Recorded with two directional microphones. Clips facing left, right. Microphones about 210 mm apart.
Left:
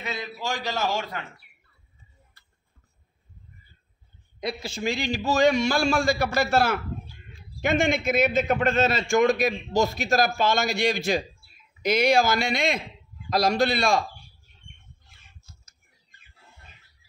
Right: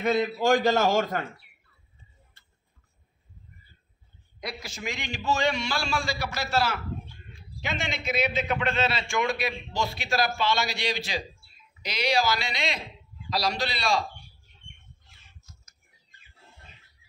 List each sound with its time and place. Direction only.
0.0 s a man's voice: 55° right (ahead or behind)
4.4 s a man's voice: 25° left (ahead or behind); by 14.0 s 50° left (ahead or behind)
15.5 s a sound: 30° left (ahead or behind)